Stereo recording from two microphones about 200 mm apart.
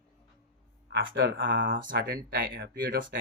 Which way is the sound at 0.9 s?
65° right (ahead or behind).